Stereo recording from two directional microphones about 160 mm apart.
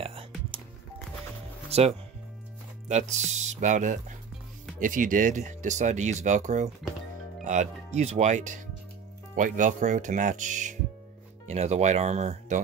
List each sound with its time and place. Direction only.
0.0 s music: 35° right (ahead or behind)
1.7 s speech: 40° right (ahead or behind)